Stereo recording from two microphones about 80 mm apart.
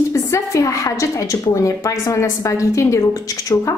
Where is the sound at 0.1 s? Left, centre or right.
Left.